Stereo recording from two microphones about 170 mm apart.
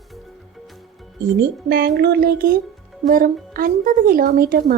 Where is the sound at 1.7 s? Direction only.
70° right (ahead or behind).